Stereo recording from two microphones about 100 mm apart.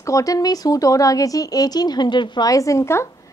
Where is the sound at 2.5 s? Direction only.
35° left (ahead or behind).